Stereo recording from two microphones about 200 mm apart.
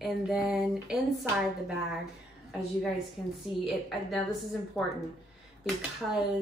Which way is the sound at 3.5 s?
25° left (ahead or behind).